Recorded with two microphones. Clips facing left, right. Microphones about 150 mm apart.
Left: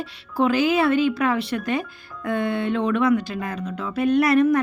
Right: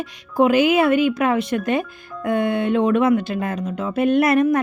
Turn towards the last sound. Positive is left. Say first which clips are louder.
# right 1 dB
turn(degrees=-20)  # may be behind; listen again after turning